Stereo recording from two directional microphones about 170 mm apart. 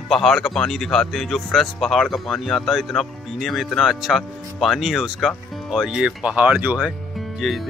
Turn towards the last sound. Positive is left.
turn(degrees=0)  # may be behind; listen again after turning